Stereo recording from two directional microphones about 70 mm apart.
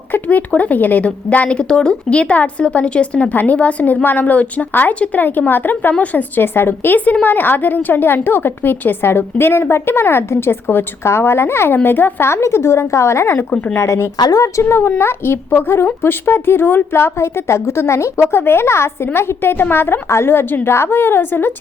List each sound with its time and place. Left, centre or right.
0.1 s a woman's voice: left
14.2 s a woman's voice: left